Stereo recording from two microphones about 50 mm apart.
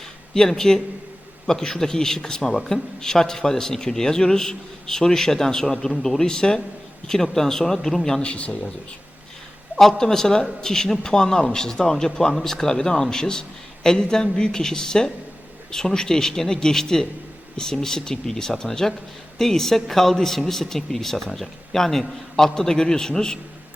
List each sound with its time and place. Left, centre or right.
0.3 s speech: centre
8.2 s speech: left
9.7 s speech: centre